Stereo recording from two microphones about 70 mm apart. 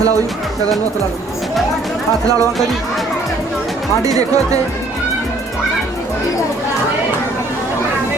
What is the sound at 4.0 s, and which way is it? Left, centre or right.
Speech, right.